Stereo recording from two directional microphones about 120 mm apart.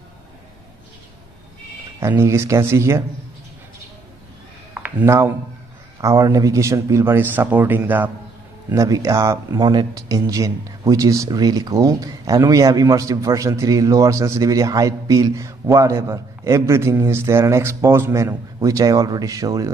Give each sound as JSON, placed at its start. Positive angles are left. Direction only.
{"t": 2.0, "sound": "speech", "side_deg": -20}
{"t": 5.0, "sound": "speech", "side_deg": -25}
{"t": 8.7, "sound": "speech", "side_deg": -25}